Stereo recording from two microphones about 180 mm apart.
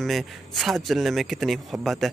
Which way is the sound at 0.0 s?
Centre (ahead or behind).